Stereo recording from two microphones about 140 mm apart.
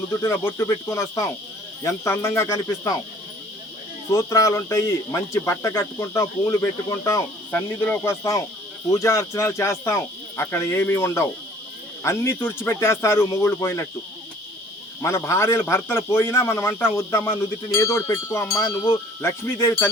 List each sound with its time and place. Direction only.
0.3 s speech: 20° left (ahead or behind)
4.1 s speech: 20° left (ahead or behind)
15.0 s speech: 20° left (ahead or behind)
19.5 s a sound: 20° left (ahead or behind)